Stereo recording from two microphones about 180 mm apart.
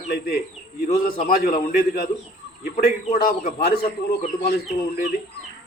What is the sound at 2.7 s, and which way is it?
Speech, 45° left (ahead or behind).